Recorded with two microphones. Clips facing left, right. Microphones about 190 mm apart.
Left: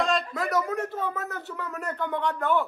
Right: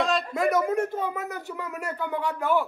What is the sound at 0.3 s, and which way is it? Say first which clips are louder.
Speech: right 4 dB; 20° right (ahead or behind).